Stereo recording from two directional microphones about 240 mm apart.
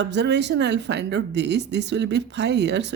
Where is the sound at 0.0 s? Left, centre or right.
Right.